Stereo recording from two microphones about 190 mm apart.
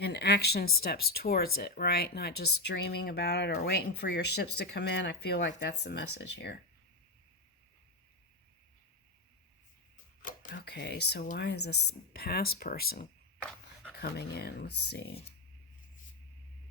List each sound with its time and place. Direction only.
0.0 s speech: 60° left (ahead or behind)
10.5 s speech: 60° left (ahead or behind)